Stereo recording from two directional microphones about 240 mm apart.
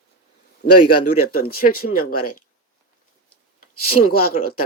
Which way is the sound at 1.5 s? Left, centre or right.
Left.